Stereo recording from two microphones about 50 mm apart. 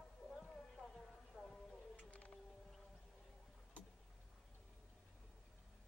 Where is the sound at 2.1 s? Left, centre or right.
Left.